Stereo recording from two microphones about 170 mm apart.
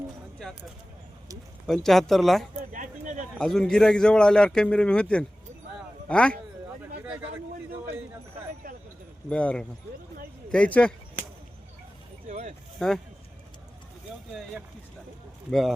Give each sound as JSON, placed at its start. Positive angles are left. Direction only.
{"t": 1.6, "sound": "a man's voice", "side_deg": 0}
{"t": 2.6, "sound": "a sound", "side_deg": -50}
{"t": 3.3, "sound": "a man's voice", "side_deg": 5}
{"t": 9.3, "sound": "speech", "side_deg": 5}
{"t": 12.3, "sound": "a sound", "side_deg": -40}
{"t": 12.8, "sound": "a man's voice", "side_deg": 5}
{"t": 15.4, "sound": "a man's voice", "side_deg": 0}